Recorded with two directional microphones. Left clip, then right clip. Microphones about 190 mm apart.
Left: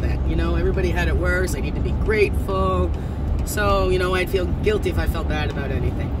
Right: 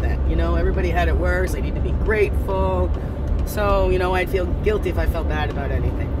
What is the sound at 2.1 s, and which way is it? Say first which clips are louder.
Speech: even; 15° left (ahead or behind).